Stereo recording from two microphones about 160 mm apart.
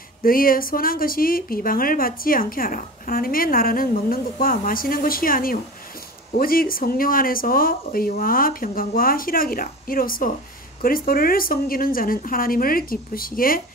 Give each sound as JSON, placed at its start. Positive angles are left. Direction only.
{"t": 0.2, "sound": "speech", "side_deg": 65}